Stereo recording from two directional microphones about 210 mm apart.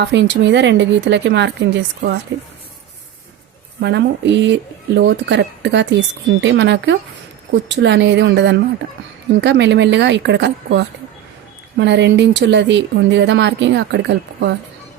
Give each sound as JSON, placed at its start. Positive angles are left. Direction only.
{"t": 0.0, "sound": "speech", "side_deg": -55}
{"t": 3.8, "sound": "speech", "side_deg": -55}